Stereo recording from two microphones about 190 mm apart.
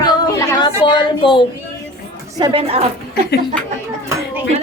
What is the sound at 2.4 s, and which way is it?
Speech, 30° right (ahead or behind).